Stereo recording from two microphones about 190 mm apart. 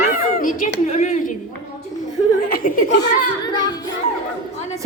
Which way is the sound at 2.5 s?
45° left (ahead or behind).